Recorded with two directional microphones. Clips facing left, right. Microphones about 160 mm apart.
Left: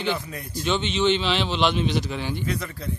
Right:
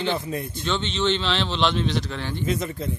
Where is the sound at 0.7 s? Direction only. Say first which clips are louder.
Left 2 dB; 10° left (ahead or behind).